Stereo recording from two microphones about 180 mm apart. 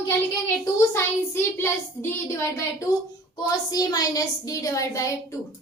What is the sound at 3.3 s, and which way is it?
A woman's voice, 20° left (ahead or behind).